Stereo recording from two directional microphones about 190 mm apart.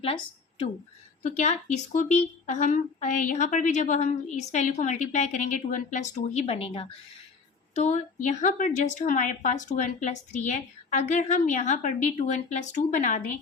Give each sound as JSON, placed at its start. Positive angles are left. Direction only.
{"t": 0.0, "sound": "a woman's voice", "side_deg": 30}
{"t": 1.2, "sound": "speech", "side_deg": 40}